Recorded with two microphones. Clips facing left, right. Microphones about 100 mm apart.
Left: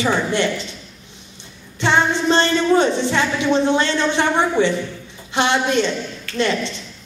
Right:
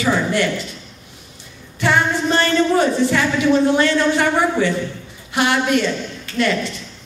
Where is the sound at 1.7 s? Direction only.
25° left (ahead or behind).